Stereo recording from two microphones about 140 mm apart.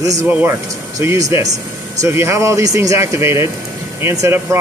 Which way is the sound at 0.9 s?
25° right (ahead or behind).